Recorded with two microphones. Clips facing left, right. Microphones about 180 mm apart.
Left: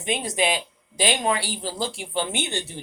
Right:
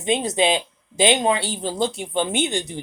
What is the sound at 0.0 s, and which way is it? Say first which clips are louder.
Speech: right 5 dB; 20° right (ahead or behind).